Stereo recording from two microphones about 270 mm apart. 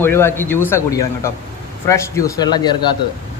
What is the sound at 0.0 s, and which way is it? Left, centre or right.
Speech, centre.